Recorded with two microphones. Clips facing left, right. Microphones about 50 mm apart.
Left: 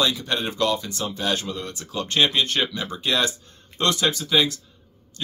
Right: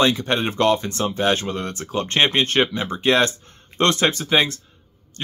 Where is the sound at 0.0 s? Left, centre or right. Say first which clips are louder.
Right 5 dB; right.